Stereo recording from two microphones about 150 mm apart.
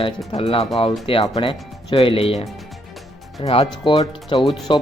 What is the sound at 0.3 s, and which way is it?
Speech, 40° left (ahead or behind).